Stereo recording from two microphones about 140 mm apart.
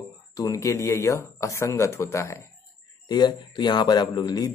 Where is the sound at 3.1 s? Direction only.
30° left (ahead or behind).